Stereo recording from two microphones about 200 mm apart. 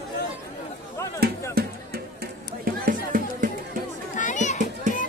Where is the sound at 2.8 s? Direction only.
45° right (ahead or behind).